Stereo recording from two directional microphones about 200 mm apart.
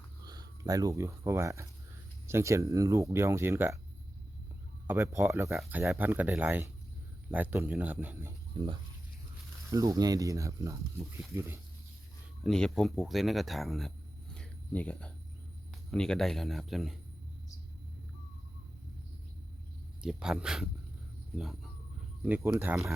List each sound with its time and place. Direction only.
0.3 s speech: 20° right (ahead or behind)
4.9 s speech: 10° right (ahead or behind)
5.5 s speech: centre (ahead or behind)
8.5 s speech: 25° right (ahead or behind)
12.4 s speech: 5° left (ahead or behind)
20.0 s speech: 5° right (ahead or behind)